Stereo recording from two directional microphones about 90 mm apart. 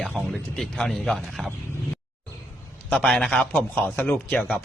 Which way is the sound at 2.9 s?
5° left (ahead or behind).